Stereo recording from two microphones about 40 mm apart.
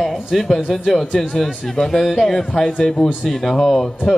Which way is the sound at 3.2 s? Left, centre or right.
Centre.